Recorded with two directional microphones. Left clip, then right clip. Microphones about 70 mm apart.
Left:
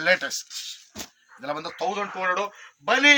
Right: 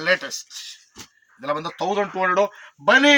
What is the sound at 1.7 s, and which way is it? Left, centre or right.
Speech, right.